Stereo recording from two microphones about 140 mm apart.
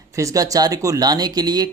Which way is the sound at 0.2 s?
25° right (ahead or behind).